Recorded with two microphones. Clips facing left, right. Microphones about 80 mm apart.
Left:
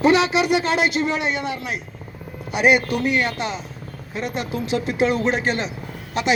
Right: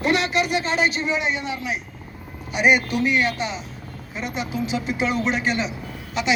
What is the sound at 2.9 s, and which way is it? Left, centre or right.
Speech, left.